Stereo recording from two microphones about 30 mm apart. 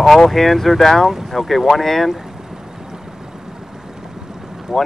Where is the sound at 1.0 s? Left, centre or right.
Centre.